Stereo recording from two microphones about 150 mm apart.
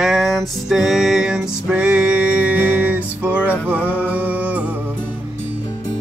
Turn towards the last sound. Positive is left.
turn(degrees=-10)  # may be behind; listen again after turning